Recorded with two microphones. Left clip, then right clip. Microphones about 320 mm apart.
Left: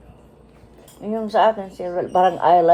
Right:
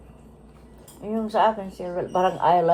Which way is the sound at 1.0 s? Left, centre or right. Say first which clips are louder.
Left 4 dB; left.